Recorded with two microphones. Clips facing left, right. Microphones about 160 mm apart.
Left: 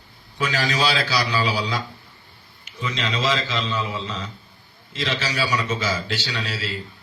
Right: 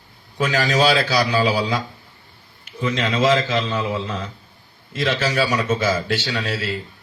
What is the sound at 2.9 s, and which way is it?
A man's voice, 50° right (ahead or behind).